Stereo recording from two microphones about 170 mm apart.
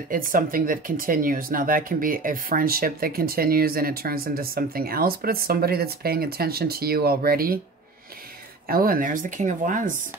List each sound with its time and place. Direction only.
0.1 s speech: 55° right (ahead or behind)
8.6 s speech: 60° right (ahead or behind)